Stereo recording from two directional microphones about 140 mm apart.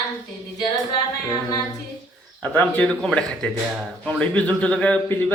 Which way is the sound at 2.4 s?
10° left (ahead or behind).